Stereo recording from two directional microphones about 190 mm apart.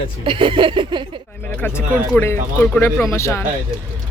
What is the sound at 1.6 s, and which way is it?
Speech, 10° left (ahead or behind).